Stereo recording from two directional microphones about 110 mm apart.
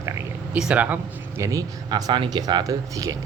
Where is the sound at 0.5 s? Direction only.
10° right (ahead or behind).